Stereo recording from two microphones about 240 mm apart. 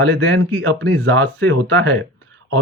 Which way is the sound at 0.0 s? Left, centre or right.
Right.